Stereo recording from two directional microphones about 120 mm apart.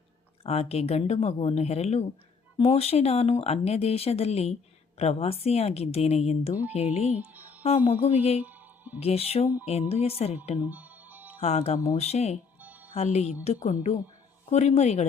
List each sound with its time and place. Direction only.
0.4 s speech: 60° left (ahead or behind)
7.1 s music: 15° right (ahead or behind)
7.9 s speech: 60° left (ahead or behind)
8.4 s music: 15° right (ahead or behind)
9.0 s speech: 55° left (ahead or behind)
10.6 s music: 15° right (ahead or behind)
11.3 s speech: 65° left (ahead or behind)
12.5 s music: 15° right (ahead or behind)
12.9 s speech: 65° left (ahead or behind); by 14.0 s 90° left
14.5 s speech: 70° left (ahead or behind)